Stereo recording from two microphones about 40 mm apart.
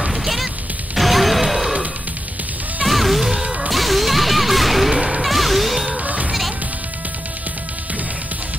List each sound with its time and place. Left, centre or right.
0.0 s music: centre
0.9 s a sound: centre
2.8 s music: centre
3.7 s whip: centre
6.0 s music: right